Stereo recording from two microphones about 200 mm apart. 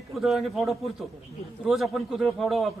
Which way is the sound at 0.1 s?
Centre (ahead or behind).